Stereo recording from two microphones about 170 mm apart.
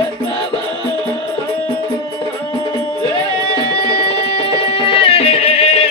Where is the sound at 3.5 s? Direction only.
35° left (ahead or behind).